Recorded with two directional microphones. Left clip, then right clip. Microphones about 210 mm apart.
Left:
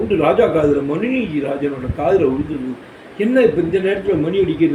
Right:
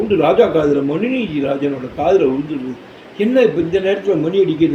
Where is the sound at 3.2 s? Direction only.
10° right (ahead or behind).